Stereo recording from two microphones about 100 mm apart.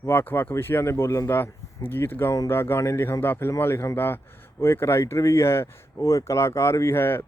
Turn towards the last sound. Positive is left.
turn(degrees=20)  # may be behind; listen again after turning